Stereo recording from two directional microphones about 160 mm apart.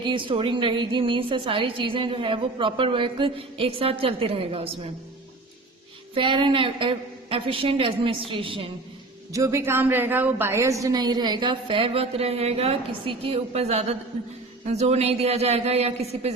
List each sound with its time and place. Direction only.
0.0 s a woman's voice: 30° right (ahead or behind)
6.1 s a woman's voice: 30° right (ahead or behind)
9.3 s a woman's voice: 20° right (ahead or behind); by 16.3 s 40° right (ahead or behind)